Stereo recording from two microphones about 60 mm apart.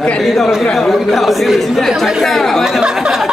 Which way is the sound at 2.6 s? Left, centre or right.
Centre.